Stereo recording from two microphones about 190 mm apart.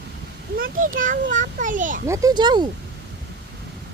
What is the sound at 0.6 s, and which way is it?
A child's voice, 45° right (ahead or behind).